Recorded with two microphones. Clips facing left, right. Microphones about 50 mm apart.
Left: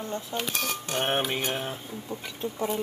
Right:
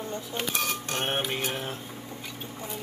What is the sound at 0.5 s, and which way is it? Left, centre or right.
Speech, centre.